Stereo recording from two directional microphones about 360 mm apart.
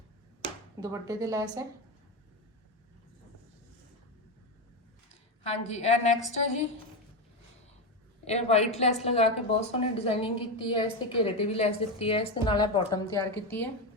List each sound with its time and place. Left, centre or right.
0.4 s speech: centre
5.4 s a woman's voice: centre
8.2 s a woman's voice: centre